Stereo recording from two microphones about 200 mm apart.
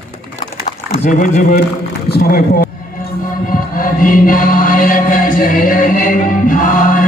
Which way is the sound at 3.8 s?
45° left (ahead or behind).